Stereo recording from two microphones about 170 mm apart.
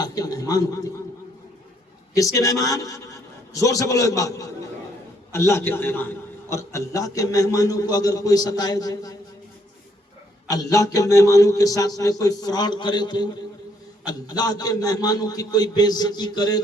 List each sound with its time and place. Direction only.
0.0 s a sound: 20° left (ahead or behind)
2.1 s a man's voice: 20° left (ahead or behind)
10.5 s a man's voice: 20° left (ahead or behind)